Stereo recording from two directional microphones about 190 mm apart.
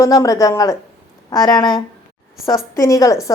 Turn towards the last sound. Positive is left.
turn(degrees=15)  # may be behind; listen again after turning